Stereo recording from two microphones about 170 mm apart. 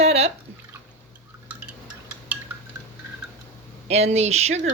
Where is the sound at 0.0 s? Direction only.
35° right (ahead or behind).